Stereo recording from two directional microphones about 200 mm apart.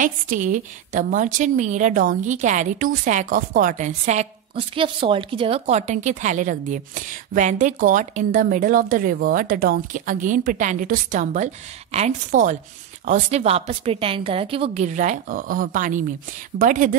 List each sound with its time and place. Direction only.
0.0 s a woman's voice: 40° right (ahead or behind)